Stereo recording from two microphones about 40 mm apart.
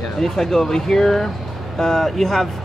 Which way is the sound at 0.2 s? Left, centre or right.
Centre.